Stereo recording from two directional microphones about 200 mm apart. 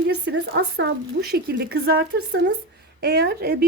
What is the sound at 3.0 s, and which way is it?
Speech, 55° right (ahead or behind).